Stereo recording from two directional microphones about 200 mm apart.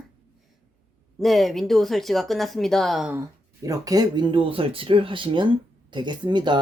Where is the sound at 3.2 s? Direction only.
15° right (ahead or behind).